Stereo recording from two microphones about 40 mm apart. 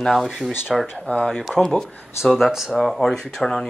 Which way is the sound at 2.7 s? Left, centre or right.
Centre.